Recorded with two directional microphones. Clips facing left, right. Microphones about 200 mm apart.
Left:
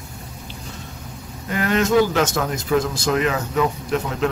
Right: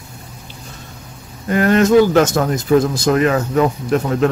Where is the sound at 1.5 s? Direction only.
45° right (ahead or behind).